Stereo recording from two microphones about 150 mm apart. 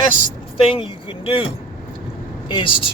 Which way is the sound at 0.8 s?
35° left (ahead or behind).